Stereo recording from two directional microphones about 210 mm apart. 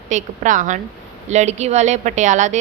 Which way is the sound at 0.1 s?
35° right (ahead or behind).